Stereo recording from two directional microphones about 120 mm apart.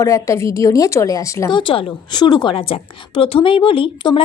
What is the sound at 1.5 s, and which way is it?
A woman's voice, 45° left (ahead or behind).